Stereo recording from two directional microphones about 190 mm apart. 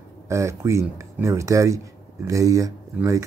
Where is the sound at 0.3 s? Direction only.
15° right (ahead or behind).